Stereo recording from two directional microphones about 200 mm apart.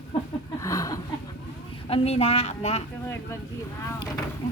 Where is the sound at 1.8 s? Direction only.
30° left (ahead or behind).